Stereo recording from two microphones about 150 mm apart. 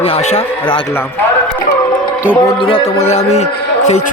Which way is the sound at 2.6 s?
35° left (ahead or behind).